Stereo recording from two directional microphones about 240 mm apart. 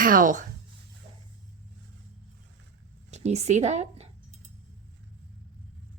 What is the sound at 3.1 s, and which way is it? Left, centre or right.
Speech, right.